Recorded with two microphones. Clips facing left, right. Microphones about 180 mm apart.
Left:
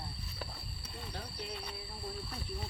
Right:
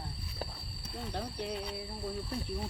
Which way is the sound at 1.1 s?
60° right (ahead or behind).